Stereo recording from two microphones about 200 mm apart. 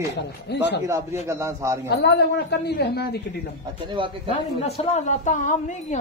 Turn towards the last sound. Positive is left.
turn(degrees=40)  # may be behind; listen again after turning